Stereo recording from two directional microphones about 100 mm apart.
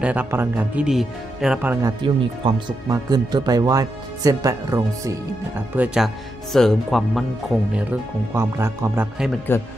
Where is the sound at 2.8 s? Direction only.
40° right (ahead or behind).